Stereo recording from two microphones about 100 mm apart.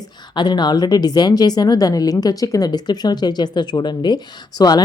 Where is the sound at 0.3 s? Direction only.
50° left (ahead or behind).